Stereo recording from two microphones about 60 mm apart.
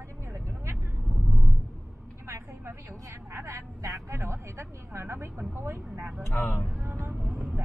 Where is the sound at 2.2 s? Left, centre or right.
Right.